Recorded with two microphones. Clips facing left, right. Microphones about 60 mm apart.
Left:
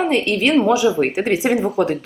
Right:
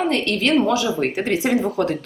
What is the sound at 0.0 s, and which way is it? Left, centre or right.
A woman's voice, centre.